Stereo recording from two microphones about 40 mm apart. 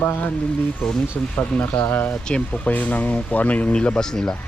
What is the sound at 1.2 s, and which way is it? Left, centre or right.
Speech, left.